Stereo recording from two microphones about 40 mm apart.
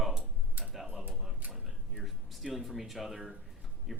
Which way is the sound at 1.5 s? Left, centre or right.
Centre.